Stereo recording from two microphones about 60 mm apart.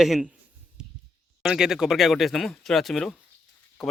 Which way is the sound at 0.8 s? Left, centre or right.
Centre.